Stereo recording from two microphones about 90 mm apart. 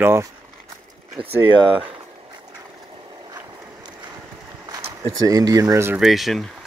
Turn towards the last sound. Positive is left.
turn(degrees=0)  # may be behind; listen again after turning